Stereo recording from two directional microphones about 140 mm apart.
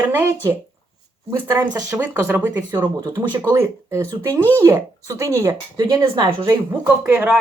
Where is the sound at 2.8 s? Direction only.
30° right (ahead or behind).